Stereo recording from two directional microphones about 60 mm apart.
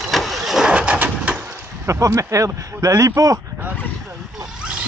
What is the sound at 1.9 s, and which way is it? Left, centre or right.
Speech, right.